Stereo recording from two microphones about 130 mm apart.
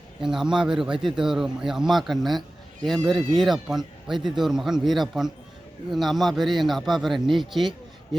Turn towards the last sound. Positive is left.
turn(degrees=0)  # may be behind; listen again after turning